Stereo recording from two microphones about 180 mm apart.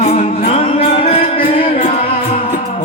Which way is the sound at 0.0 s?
35° left (ahead or behind).